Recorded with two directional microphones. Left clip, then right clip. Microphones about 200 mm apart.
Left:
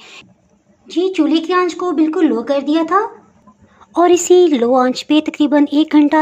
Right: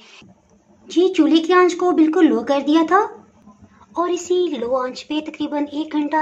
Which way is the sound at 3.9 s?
35° left (ahead or behind).